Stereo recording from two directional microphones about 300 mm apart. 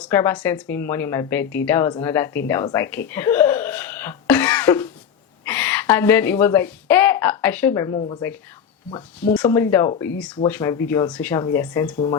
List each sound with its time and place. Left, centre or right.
0.0 s speech: centre
2.5 s a sound: centre
5.5 s speech: centre